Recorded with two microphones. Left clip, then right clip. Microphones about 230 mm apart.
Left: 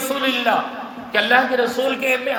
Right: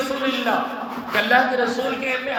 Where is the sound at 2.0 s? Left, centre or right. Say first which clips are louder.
Left 4 dB; left.